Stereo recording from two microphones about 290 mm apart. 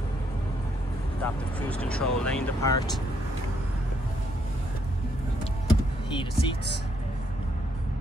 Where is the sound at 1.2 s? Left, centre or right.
Centre.